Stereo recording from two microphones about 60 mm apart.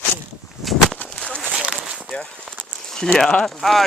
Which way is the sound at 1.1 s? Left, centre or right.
Centre.